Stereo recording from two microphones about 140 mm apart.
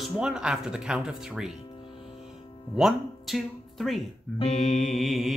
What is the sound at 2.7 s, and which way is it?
Speech, 5° right (ahead or behind).